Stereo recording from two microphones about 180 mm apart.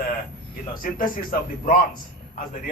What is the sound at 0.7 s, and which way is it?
Speech, 50° left (ahead or behind).